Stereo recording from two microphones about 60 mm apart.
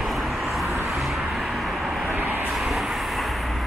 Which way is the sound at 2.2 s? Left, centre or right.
Right.